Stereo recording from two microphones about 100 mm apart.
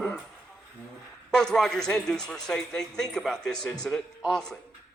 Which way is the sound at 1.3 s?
5° left (ahead or behind).